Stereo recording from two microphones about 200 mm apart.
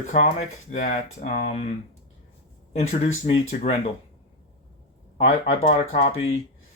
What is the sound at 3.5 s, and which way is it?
Speech, 45° left (ahead or behind).